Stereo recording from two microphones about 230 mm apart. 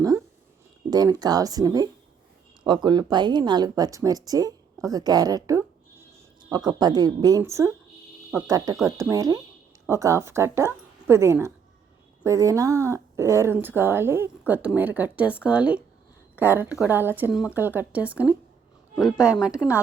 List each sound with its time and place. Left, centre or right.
0.9 s a woman's voice: centre